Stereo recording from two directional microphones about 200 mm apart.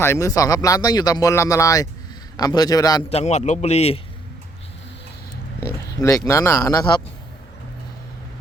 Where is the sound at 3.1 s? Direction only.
35° left (ahead or behind).